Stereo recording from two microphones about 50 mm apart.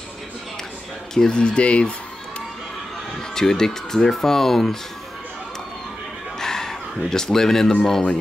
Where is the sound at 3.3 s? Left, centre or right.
Centre.